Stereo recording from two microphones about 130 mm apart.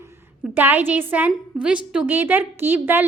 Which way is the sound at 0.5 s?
15° right (ahead or behind).